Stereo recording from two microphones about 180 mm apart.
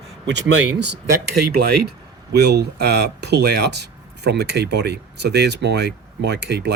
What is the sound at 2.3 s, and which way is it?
Speech, 65° right (ahead or behind).